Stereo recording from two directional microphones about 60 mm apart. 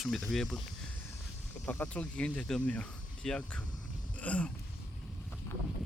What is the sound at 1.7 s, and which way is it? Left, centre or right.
Speech, left.